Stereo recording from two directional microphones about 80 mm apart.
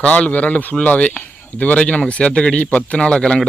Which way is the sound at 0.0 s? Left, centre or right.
Centre.